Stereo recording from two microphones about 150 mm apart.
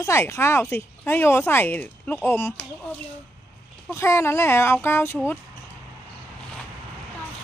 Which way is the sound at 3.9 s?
20° left (ahead or behind).